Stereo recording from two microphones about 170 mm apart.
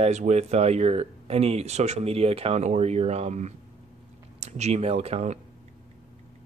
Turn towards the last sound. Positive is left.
turn(degrees=-40)  # may be behind; listen again after turning